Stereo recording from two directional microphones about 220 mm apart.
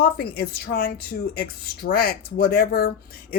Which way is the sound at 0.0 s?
45° left (ahead or behind).